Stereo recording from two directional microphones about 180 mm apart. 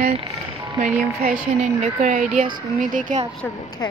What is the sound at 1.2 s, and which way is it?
Speech, 45° right (ahead or behind).